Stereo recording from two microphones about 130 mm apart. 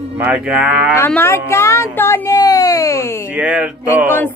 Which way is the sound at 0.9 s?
15° left (ahead or behind).